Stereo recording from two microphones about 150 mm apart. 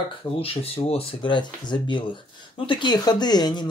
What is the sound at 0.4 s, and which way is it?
Speech, 40° left (ahead or behind).